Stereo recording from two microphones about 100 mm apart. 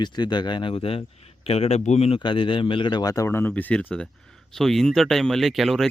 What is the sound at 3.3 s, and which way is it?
Speech, 20° left (ahead or behind).